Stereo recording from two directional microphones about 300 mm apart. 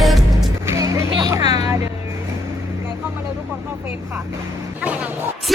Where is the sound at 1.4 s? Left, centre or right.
Left.